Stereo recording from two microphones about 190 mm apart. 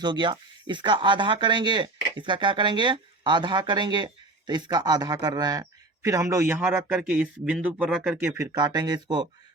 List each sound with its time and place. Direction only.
0.0 s speech: 25° right (ahead or behind)